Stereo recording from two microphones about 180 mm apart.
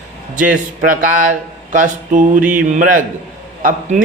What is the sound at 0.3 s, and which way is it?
A man's voice, 45° right (ahead or behind).